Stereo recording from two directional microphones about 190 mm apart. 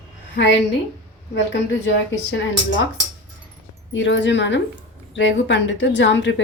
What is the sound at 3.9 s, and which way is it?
Speech, 75° left (ahead or behind).